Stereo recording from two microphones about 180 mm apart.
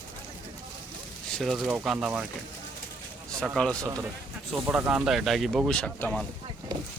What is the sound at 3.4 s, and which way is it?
Speech, centre (ahead or behind).